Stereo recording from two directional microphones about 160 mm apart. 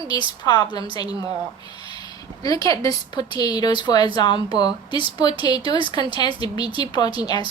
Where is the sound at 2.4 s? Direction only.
20° left (ahead or behind).